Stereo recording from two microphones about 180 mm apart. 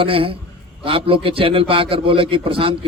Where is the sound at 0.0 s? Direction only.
30° right (ahead or behind).